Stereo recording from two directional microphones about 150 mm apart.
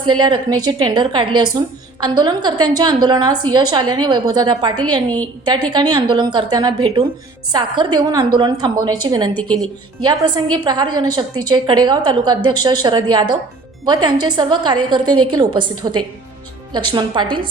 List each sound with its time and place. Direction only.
0.0 s a woman's voice: 30° right (ahead or behind)
9.3 s speech: 10° left (ahead or behind)
10.0 s a woman's voice: 30° right (ahead or behind)